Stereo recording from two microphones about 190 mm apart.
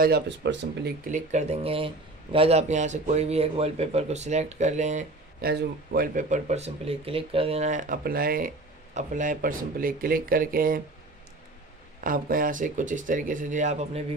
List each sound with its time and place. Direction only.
0.0 s speech: 60° right (ahead or behind)
1.0 s speech: 40° right (ahead or behind)
5.4 s speech: 55° right (ahead or behind)
12.0 s speech: 45° right (ahead or behind)